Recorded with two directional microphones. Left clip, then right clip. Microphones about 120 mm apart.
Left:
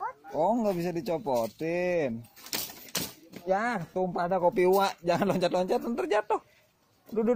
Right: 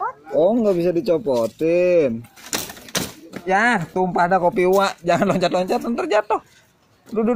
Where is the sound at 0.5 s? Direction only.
90° left.